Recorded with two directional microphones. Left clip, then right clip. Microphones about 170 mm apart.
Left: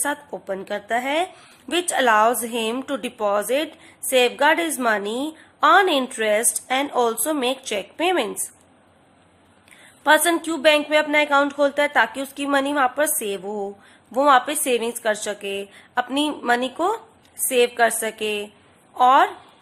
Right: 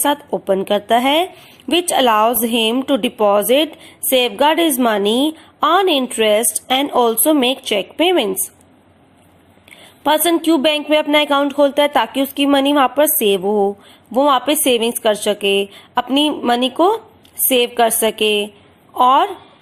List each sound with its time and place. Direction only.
0.0 s a woman's voice: 20° right (ahead or behind)
10.0 s a woman's voice: 20° right (ahead or behind)